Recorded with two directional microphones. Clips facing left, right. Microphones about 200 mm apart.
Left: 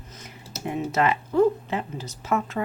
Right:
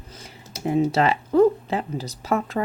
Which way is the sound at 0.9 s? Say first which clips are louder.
Right 3 dB; 30° right (ahead or behind).